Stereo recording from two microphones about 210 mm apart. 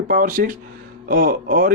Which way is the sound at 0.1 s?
40° right (ahead or behind).